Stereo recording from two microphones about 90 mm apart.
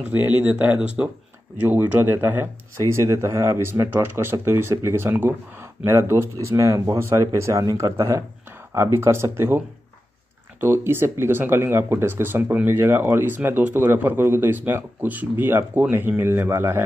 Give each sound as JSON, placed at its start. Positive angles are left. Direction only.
{"t": 0.1, "sound": "speech", "side_deg": -20}
{"t": 10.6, "sound": "speech", "side_deg": -25}